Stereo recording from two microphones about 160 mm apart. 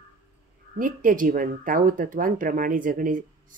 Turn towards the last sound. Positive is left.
turn(degrees=-55)  # may be behind; listen again after turning